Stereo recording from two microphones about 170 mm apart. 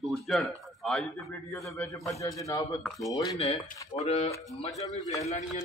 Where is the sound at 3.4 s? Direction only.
40° left (ahead or behind).